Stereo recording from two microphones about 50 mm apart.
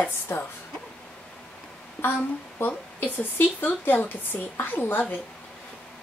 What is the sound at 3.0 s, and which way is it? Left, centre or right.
A woman's voice, left.